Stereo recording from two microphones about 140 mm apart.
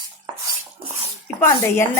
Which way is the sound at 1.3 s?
15° left (ahead or behind).